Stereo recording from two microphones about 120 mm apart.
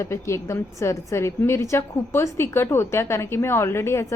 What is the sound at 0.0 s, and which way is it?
A woman's voice, 25° left (ahead or behind).